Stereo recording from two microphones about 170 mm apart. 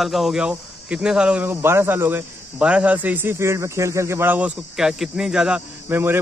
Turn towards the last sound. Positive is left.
turn(degrees=-15)  # may be behind; listen again after turning